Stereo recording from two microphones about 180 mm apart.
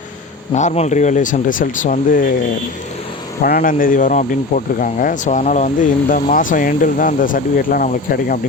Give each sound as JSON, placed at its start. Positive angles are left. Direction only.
{"t": 0.5, "sound": "speech", "side_deg": 40}
{"t": 3.4, "sound": "speech", "side_deg": 55}